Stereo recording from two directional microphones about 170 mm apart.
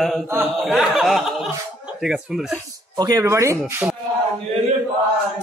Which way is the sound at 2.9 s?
20° right (ahead or behind).